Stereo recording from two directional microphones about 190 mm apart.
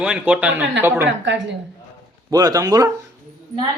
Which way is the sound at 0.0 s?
5° right (ahead or behind).